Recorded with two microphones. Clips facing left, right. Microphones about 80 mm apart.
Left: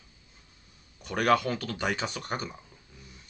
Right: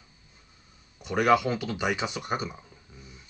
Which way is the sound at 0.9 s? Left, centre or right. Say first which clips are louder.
Right 2 dB; centre.